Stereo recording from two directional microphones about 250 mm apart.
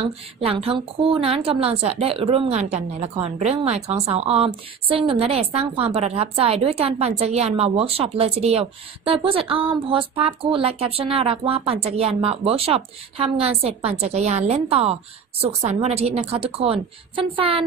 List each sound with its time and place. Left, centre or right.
0.4 s a woman's voice: right